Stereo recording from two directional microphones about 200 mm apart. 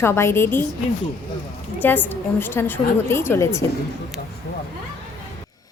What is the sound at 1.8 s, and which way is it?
A woman's voice, 10° left (ahead or behind).